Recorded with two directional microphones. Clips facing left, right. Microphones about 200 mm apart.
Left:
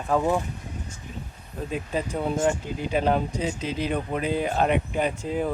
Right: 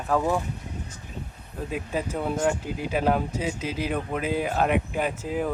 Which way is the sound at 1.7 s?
5° right (ahead or behind).